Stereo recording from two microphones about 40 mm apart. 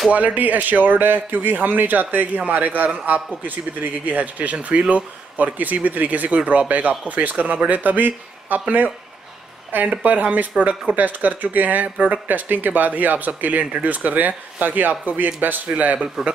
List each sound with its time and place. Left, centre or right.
0.1 s a man's voice: right